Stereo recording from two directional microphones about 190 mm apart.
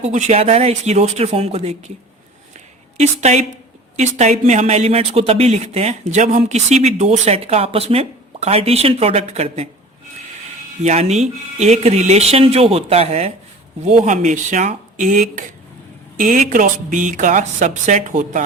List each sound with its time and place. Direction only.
0.0 s speech: 35° right (ahead or behind)
3.0 s speech: 35° right (ahead or behind)
10.8 s speech: 35° right (ahead or behind)